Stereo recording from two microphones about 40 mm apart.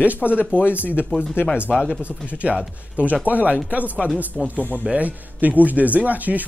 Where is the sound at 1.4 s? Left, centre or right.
Left.